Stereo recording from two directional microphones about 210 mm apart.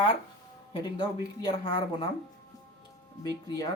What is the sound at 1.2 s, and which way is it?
Speech, 20° left (ahead or behind).